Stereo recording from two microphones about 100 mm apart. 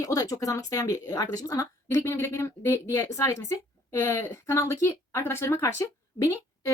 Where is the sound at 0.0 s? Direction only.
35° left (ahead or behind).